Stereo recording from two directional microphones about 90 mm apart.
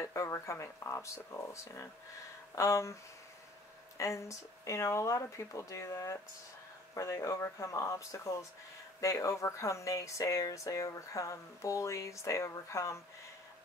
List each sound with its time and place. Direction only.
0.0 s speech: 35° left (ahead or behind)
4.0 s speech: 35° left (ahead or behind)